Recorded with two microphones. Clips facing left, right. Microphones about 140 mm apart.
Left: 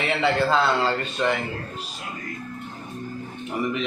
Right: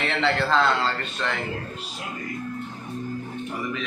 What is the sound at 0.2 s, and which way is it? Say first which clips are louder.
Speech: even; 10° left (ahead or behind).